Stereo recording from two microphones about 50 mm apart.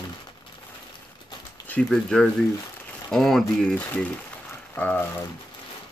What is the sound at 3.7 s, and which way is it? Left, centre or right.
Speech, left.